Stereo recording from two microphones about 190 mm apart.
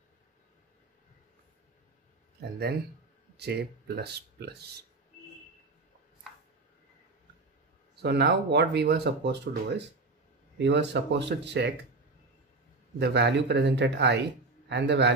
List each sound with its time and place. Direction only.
3.3 s speech: 60° right (ahead or behind)
8.0 s speech: 60° right (ahead or behind)
13.0 s speech: 65° right (ahead or behind)